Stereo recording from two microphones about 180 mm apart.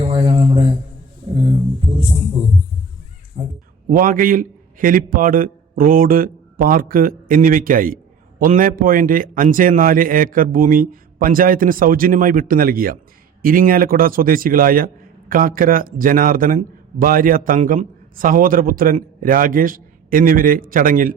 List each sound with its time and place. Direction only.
0.0 s mantra: 30° right (ahead or behind)
3.3 s a sound: 35° right (ahead or behind)
3.8 s a man's voice: 50° right (ahead or behind)